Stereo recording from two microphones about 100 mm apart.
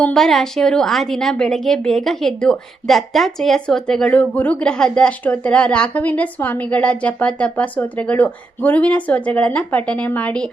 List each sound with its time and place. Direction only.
0.0 s a woman's voice: 5° left (ahead or behind)